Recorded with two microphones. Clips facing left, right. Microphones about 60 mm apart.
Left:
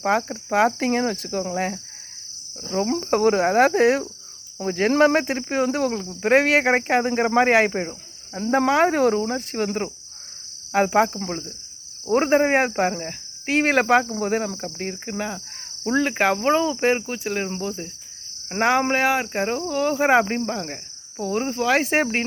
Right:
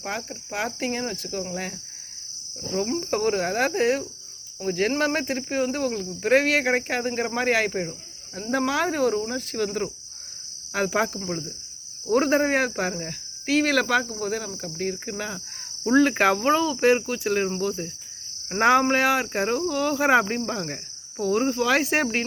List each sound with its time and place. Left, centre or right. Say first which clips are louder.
0.0 s cricket: left 10 dB; left
1.5 s speech: left 7 dB; left
2.8 s speech: left 6 dB; left
3.8 s cricket: left 5 dB; left
4.6 s speech: left 6 dB; left
10.7 s cricket: left 6 dB; left
12.1 s speech: left 3 dB; left
14.8 s cricket: right 1 dB; left
15.9 s speech: right 1 dB; centre
17.2 s speech: right 3 dB; centre